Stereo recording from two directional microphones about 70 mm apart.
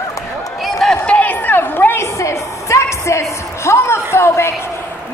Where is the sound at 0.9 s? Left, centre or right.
Centre.